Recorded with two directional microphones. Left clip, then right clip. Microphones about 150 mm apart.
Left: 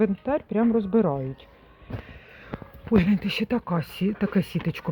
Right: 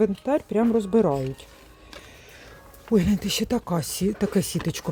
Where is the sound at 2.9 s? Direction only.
25° right (ahead or behind).